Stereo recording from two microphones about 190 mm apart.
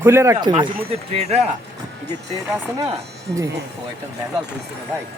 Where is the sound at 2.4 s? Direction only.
15° right (ahead or behind).